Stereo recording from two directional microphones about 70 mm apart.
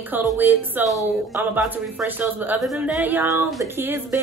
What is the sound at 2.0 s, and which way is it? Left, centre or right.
Speech, right.